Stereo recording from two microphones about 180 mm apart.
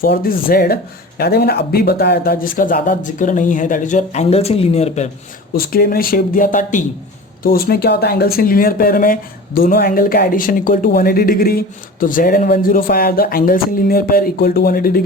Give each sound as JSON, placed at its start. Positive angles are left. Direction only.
{"t": 0.0, "sound": "speech", "side_deg": 55}
{"t": 5.5, "sound": "speech", "side_deg": 55}
{"t": 7.4, "sound": "speech", "side_deg": 55}